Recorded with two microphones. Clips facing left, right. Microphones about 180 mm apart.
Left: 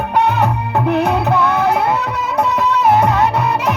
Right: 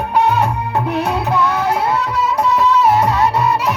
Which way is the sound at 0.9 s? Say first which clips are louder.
Left 5 dB; 60° left (ahead or behind).